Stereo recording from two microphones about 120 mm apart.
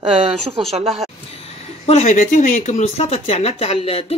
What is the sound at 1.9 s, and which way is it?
Speech, 70° left (ahead or behind).